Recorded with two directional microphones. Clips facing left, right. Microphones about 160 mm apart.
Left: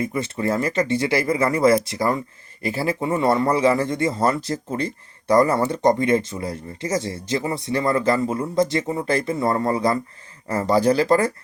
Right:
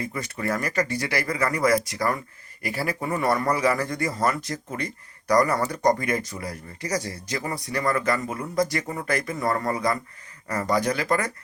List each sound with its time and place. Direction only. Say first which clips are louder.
0.0 s speech: left 6 dB; 25° left (ahead or behind)